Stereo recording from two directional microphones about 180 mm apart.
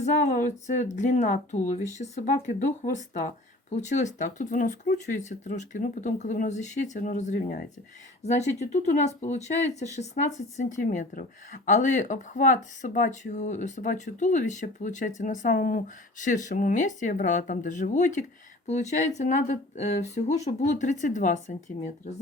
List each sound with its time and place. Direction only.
0.0 s speech: 40° left (ahead or behind)
8.2 s speech: 40° left (ahead or behind)